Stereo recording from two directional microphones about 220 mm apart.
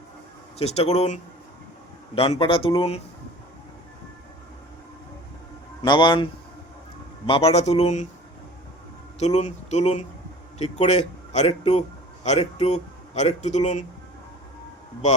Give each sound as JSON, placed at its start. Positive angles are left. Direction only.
{"t": 0.6, "sound": "a man's voice", "side_deg": 30}
{"t": 5.8, "sound": "a man's voice", "side_deg": 20}
{"t": 7.3, "sound": "a man's voice", "side_deg": 25}
{"t": 9.1, "sound": "a man's voice", "side_deg": 30}